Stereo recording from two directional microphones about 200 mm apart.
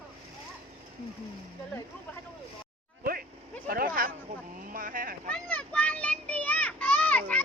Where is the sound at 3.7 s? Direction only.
45° right (ahead or behind).